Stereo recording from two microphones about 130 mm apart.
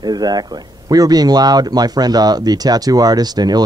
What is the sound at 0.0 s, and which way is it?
Speech, 30° right (ahead or behind).